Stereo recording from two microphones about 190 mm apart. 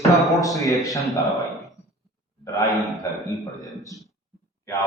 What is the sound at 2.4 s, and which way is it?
Speech, 20° left (ahead or behind).